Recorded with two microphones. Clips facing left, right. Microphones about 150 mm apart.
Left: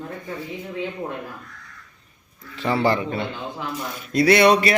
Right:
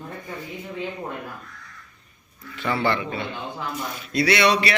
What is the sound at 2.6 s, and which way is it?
A man's voice, 35° left (ahead or behind).